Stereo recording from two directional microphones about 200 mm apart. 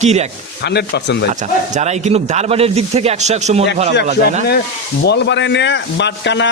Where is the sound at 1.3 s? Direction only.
35° right (ahead or behind).